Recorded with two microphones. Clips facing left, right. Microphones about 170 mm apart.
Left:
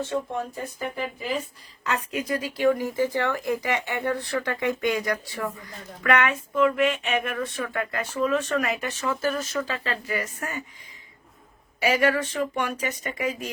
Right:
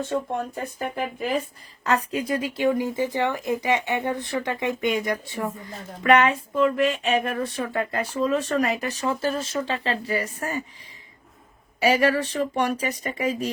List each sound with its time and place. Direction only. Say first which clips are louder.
0.5 s speech: right 2 dB; 55° right (ahead or behind)
1.8 s speech: right 4 dB; 35° right (ahead or behind)
11.8 s speech: right 2 dB; 35° right (ahead or behind)